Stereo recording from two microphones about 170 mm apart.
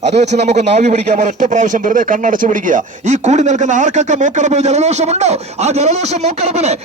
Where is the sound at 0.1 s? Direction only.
40° right (ahead or behind).